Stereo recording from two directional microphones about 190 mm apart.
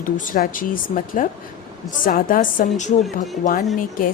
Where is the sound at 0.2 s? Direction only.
45° left (ahead or behind).